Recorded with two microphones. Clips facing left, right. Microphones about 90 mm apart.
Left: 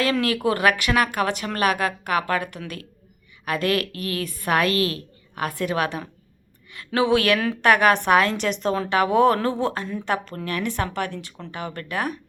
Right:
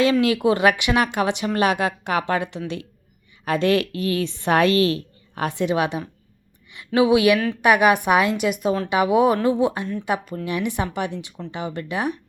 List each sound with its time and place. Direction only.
0.0 s a woman's voice: 20° right (ahead or behind)
7.3 s a woman's voice: 5° left (ahead or behind)
7.6 s a woman's voice: 15° right (ahead or behind)